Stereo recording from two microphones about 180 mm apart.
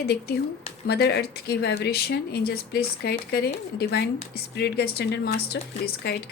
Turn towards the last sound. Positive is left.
turn(degrees=65)  # may be behind; listen again after turning